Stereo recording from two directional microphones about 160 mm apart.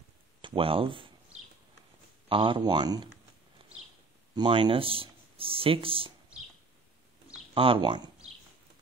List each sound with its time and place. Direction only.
0.4 s speech: 35° right (ahead or behind)
2.2 s speech: 35° right (ahead or behind)
4.4 s speech: 35° right (ahead or behind)
7.5 s speech: 35° right (ahead or behind)